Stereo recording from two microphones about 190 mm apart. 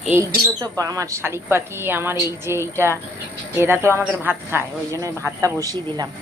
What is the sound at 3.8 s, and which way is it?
Speech, 10° right (ahead or behind).